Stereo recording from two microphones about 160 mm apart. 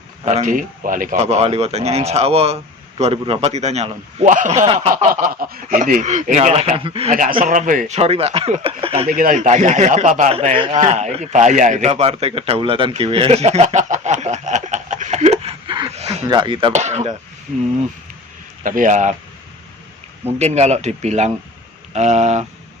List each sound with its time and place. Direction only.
0.3 s speech: 50° right (ahead or behind)
1.2 s a man's voice: 40° right (ahead or behind)
7.1 s speech: 55° right (ahead or behind); by 9.0 s 35° right (ahead or behind)
9.0 s a man's voice: 60° right (ahead or behind); by 16.7 s 30° right (ahead or behind)
16.7 s a man's voice: 45° right (ahead or behind)
18.6 s a man's voice: 55° right (ahead or behind)
20.4 s a man's voice: 45° right (ahead or behind)